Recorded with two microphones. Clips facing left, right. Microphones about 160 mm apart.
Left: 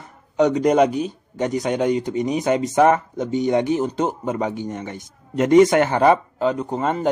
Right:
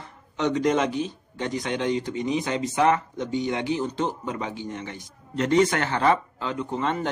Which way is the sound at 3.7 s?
45° left (ahead or behind).